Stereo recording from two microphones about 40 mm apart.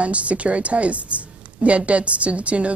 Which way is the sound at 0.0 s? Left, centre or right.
Right.